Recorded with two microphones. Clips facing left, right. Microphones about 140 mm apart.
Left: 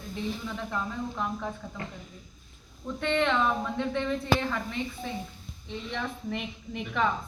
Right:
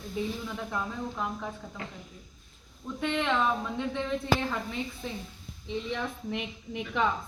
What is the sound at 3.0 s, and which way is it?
A woman's voice, 5° right (ahead or behind).